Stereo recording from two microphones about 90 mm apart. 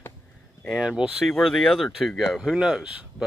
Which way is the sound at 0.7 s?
10° right (ahead or behind).